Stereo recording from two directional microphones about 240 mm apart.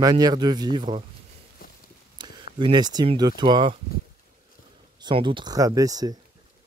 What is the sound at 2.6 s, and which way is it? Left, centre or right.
Speech, centre.